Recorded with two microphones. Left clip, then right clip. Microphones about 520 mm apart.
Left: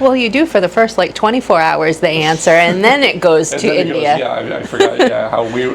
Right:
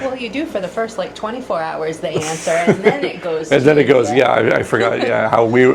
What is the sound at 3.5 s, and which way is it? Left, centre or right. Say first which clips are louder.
Speech: right 4 dB; right.